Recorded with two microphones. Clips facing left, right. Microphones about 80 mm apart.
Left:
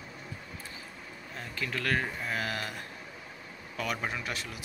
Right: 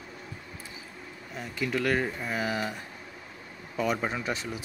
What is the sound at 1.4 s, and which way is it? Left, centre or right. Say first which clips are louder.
Speech: right 6 dB; centre.